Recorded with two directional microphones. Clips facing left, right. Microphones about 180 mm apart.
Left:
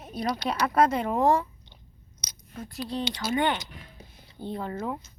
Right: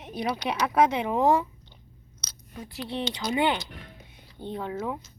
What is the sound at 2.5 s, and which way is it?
Speech, centre (ahead or behind).